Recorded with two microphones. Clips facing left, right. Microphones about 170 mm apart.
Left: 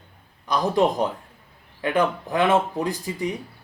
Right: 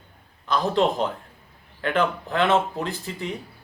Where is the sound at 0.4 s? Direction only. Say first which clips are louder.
Left 1 dB; 15° left (ahead or behind).